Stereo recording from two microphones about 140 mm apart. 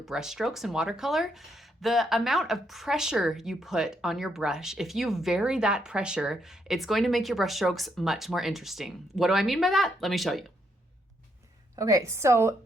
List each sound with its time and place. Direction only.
0.0 s speech: 5° right (ahead or behind)
11.8 s a woman's voice: 20° right (ahead or behind)